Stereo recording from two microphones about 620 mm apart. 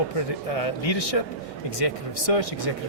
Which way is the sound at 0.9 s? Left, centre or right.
Left.